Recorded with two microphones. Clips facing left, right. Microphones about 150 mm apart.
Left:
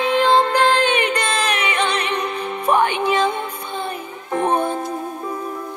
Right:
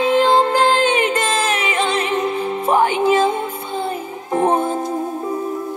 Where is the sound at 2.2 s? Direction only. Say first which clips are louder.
Right 3 dB; 20° right (ahead or behind).